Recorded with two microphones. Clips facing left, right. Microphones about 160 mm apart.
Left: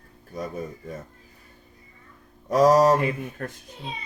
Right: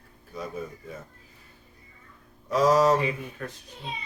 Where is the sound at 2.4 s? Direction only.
45° left (ahead or behind).